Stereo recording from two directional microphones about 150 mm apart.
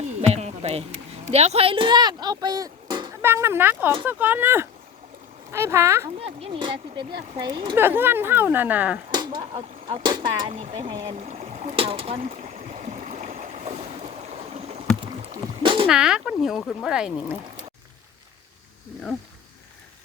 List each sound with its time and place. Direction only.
0.3 s a sound: 45° right (ahead or behind)
1.3 s speech: 45° right (ahead or behind); by 3.1 s 25° right (ahead or behind)
3.2 s speech: 15° right (ahead or behind)
6.2 s speech: 35° right (ahead or behind)
7.8 s speech: 15° right (ahead or behind)
9.1 s speech: 30° right (ahead or behind)
11.2 s speech: 45° right (ahead or behind)
12.3 s boat: 50° right (ahead or behind)
15.6 s a sound: 35° right (ahead or behind)
15.9 s speech: 5° right (ahead or behind)